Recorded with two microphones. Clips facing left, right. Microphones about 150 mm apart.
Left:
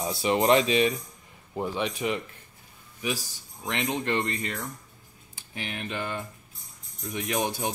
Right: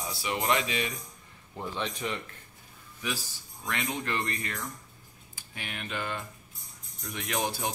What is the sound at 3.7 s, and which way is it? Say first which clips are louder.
Speech: left 5 dB; 20° left (ahead or behind).